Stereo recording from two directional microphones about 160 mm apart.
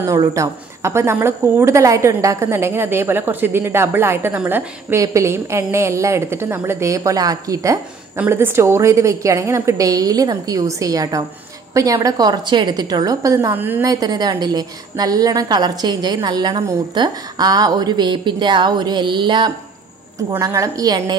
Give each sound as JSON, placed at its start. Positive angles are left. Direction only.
{"t": 0.0, "sound": "a woman's voice", "side_deg": -20}